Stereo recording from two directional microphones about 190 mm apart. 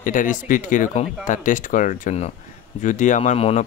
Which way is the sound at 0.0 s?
45° left (ahead or behind).